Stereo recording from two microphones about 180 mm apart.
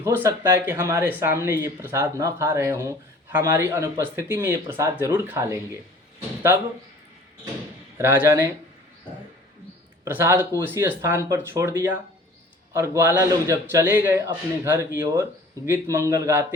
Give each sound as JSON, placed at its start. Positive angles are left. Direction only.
{"t": 0.0, "sound": "speech", "side_deg": -15}
{"t": 7.9, "sound": "speech", "side_deg": -15}
{"t": 10.0, "sound": "speech", "side_deg": -15}